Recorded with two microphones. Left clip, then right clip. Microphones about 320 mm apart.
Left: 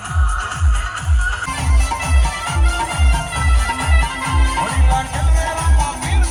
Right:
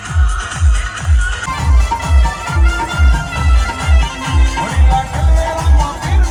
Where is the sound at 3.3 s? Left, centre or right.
Left.